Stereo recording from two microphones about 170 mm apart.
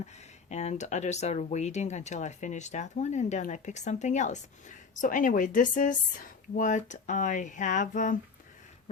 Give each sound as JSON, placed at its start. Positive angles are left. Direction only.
{"t": 0.0, "sound": "speech", "side_deg": 40}